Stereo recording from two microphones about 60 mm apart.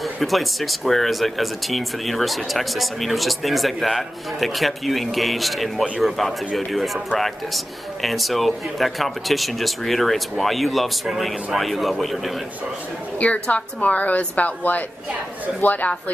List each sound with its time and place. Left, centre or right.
0.0 s speech: centre
13.2 s a woman's voice: left